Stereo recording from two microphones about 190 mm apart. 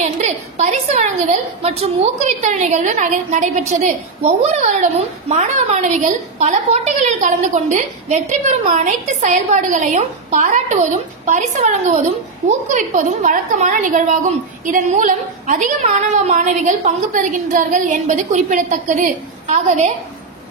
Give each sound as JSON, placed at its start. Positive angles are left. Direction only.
{"t": 0.0, "sound": "a woman's voice", "side_deg": -35}